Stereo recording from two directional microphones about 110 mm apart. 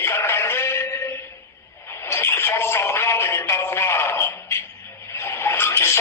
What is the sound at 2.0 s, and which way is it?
Music, 20° left (ahead or behind).